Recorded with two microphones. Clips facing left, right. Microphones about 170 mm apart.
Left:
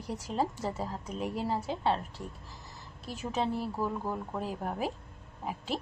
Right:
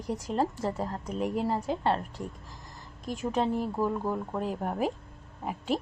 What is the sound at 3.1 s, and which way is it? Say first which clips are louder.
Speech: right 5 dB; 10° left (ahead or behind).